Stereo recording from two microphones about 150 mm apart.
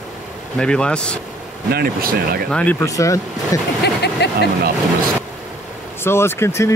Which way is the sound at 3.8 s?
90° left.